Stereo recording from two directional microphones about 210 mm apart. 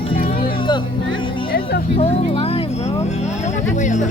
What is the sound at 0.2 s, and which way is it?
Music, 40° left (ahead or behind).